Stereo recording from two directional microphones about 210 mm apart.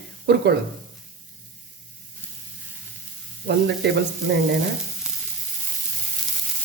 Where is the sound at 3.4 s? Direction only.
55° right (ahead or behind).